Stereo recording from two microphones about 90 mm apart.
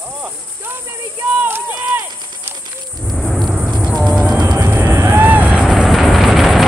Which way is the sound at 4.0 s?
Centre (ahead or behind).